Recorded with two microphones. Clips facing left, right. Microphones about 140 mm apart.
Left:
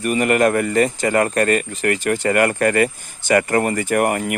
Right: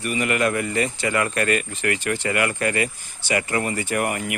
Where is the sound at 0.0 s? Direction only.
45° left (ahead or behind).